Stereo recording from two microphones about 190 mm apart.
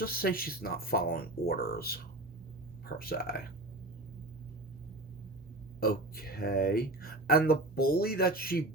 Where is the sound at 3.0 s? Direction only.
50° left (ahead or behind).